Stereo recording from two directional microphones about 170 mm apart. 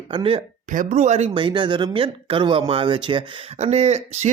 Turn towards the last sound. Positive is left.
turn(degrees=-40)  # may be behind; listen again after turning